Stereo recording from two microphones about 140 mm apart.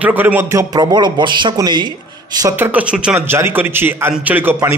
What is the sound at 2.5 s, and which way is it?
A man's voice, 15° right (ahead or behind).